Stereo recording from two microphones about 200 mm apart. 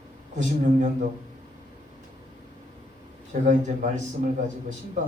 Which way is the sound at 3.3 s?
40° right (ahead or behind).